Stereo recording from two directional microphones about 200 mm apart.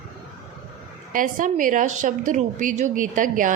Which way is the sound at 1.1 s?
40° right (ahead or behind).